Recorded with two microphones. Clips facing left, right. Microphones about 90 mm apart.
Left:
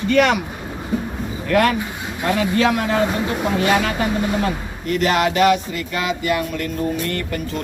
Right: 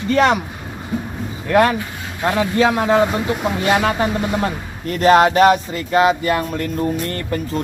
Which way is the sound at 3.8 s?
30° right (ahead or behind).